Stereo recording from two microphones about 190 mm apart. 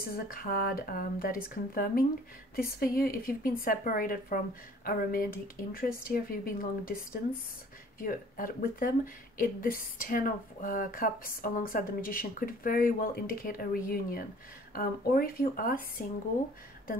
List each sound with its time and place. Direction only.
0.1 s speech: 50° left (ahead or behind)